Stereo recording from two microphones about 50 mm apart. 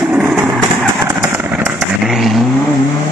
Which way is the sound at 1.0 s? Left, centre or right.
Right.